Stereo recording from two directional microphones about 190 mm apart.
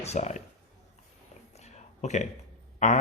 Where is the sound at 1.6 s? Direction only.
35° left (ahead or behind).